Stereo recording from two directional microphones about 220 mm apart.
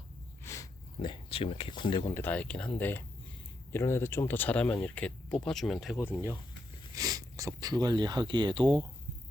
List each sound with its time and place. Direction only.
0.4 s speech: 15° left (ahead or behind)
6.9 s speech: 15° right (ahead or behind)